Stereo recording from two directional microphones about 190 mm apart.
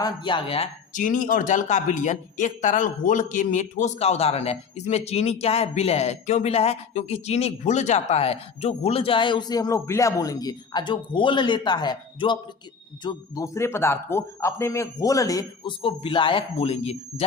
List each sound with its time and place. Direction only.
0.0 s speech: 25° left (ahead or behind)
1.0 s a man's voice: 45° left (ahead or behind)